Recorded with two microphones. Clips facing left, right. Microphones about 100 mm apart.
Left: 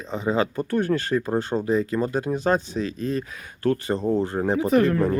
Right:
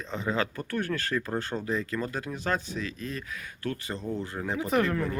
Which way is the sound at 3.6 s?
40° left (ahead or behind).